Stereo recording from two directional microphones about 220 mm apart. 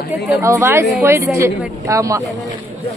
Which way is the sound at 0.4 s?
15° right (ahead or behind).